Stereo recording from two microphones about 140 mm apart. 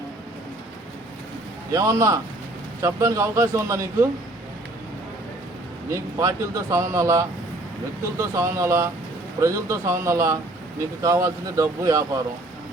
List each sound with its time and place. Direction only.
1.7 s speech: 20° right (ahead or behind)
5.9 s speech: 20° right (ahead or behind)